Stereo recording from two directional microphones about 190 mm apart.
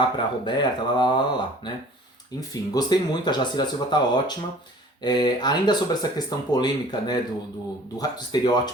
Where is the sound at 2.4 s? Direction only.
20° left (ahead or behind).